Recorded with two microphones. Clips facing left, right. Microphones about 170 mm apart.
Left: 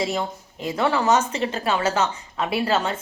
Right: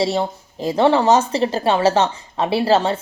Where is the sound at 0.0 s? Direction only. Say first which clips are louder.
Right 5 dB; 30° right (ahead or behind).